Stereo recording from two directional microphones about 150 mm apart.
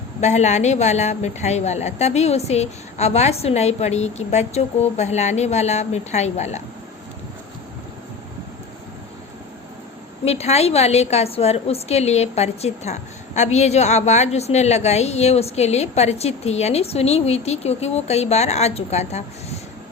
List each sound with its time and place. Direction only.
0.2 s a woman's voice: 50° left (ahead or behind)
10.2 s a woman's voice: 45° left (ahead or behind)